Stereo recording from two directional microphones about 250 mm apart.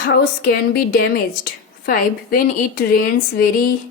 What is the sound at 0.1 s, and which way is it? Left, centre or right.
Speech, left.